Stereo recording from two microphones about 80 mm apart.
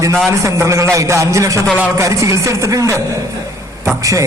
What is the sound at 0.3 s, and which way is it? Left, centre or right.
A man's voice, right.